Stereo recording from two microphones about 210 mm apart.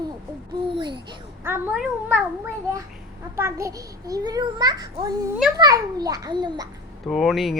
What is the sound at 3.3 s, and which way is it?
A child's voice, 15° right (ahead or behind).